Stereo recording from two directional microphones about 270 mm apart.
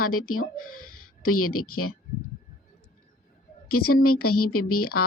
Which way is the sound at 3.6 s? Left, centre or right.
Left.